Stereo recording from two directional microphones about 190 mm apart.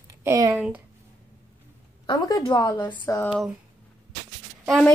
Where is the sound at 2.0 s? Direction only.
20° left (ahead or behind).